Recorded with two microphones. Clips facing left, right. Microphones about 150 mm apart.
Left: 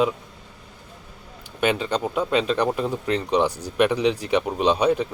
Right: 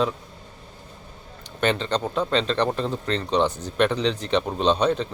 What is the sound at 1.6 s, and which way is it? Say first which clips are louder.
Speech: left 1 dB; 10° left (ahead or behind).